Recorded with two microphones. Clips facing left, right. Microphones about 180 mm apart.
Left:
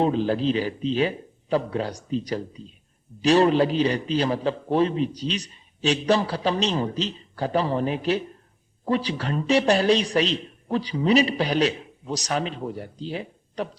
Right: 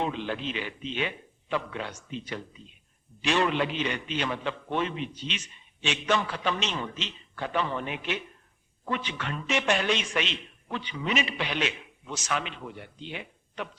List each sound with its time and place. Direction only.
0.0 s a man's voice: 35° left (ahead or behind)